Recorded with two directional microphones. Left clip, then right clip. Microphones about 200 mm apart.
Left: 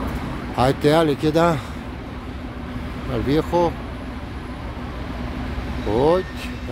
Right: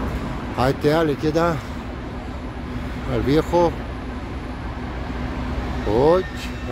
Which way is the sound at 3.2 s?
Centre (ahead or behind).